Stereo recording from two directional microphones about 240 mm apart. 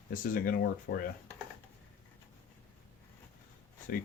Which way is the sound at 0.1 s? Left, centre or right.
Left.